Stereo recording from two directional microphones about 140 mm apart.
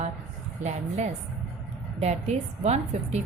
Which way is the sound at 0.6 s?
55° right (ahead or behind).